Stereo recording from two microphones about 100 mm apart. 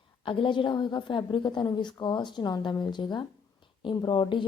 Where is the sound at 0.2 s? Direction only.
55° left (ahead or behind).